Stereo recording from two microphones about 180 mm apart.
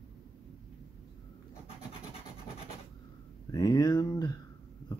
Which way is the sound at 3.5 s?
20° left (ahead or behind).